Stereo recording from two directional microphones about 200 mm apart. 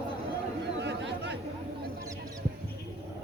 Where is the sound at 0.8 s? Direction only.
60° right (ahead or behind).